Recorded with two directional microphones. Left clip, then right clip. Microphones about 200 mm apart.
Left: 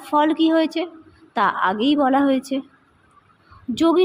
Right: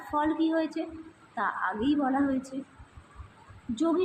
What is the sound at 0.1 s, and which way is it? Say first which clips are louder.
A woman's voice: left 10 dB; 40° left (ahead or behind).